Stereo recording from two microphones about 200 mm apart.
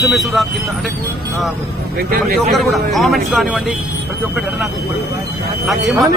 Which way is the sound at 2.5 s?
Centre (ahead or behind).